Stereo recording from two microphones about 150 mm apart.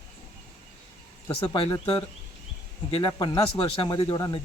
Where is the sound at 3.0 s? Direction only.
25° left (ahead or behind).